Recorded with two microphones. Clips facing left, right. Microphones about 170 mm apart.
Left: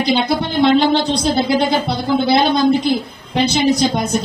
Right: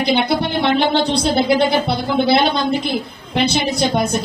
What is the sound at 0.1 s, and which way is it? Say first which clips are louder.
Speech: right 1 dB; 65° right (ahead or behind).